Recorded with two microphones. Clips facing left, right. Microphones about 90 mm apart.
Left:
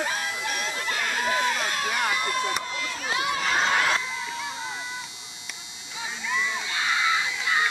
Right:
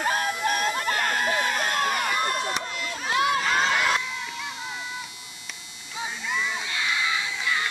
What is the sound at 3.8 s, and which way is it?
Crowd, 30° left (ahead or behind).